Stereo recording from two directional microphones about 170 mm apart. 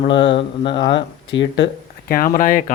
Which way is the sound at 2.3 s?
55° left (ahead or behind).